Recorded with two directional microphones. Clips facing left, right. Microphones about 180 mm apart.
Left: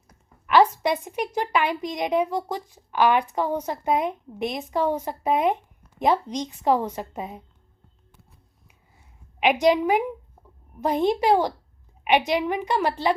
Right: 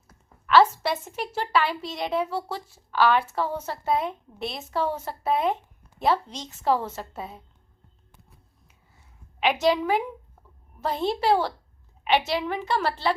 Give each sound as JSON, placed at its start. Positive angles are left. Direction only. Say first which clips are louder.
{"t": 0.1, "sound": "a woman's voice", "louder": "right 1 dB", "side_deg": 15}
{"t": 9.4, "sound": "a woman's voice", "louder": "left 3 dB", "side_deg": 15}